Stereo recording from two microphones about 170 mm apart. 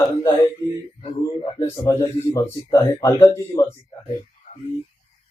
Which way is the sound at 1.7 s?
20° left (ahead or behind).